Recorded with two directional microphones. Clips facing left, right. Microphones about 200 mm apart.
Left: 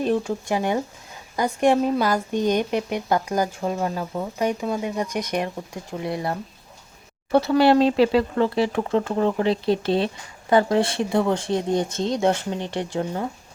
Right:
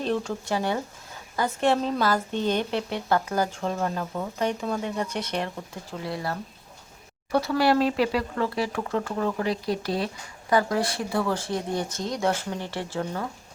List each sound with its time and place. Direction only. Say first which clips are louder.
0.0 s a woman's voice: left 5 dB; 10° left (ahead or behind)